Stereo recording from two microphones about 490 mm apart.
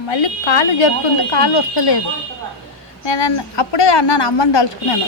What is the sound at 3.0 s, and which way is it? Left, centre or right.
A woman's voice, left.